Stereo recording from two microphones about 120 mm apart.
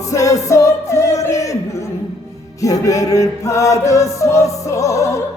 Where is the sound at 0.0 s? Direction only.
25° left (ahead or behind).